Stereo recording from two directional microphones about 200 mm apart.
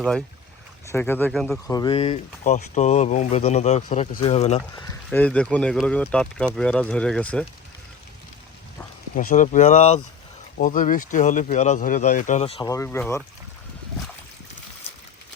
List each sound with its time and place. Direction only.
0.9 s speech: 10° left (ahead or behind)
1.6 s speech: 20° left (ahead or behind)
5.1 s speech: 5° left (ahead or behind)
9.1 s speech: 40° left (ahead or behind)
12.6 s speech: 15° left (ahead or behind)